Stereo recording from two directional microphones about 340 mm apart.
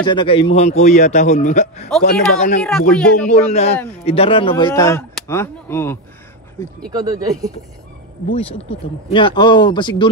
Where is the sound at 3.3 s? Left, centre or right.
Centre.